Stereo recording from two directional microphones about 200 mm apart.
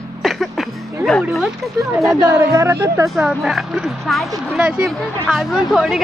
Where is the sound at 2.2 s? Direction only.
15° right (ahead or behind).